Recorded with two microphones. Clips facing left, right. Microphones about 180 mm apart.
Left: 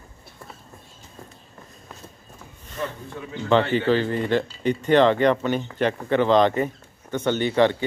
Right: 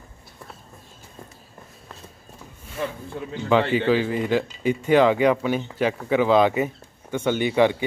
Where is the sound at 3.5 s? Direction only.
5° right (ahead or behind).